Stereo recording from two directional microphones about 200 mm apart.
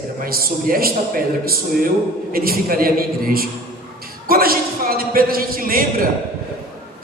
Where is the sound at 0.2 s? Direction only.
45° right (ahead or behind).